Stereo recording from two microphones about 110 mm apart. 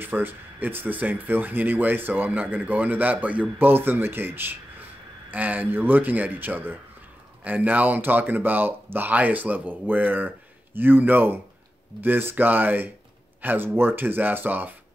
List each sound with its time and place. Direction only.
0.0 s speech: 15° right (ahead or behind)